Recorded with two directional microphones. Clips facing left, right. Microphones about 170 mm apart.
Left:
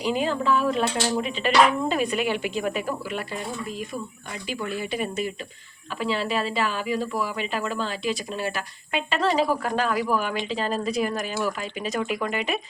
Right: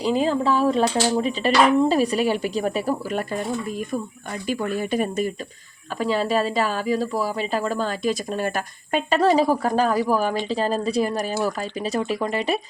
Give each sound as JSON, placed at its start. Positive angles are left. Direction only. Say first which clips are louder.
{"t": 0.0, "sound": "a woman's voice", "louder": "right 4 dB", "side_deg": -35}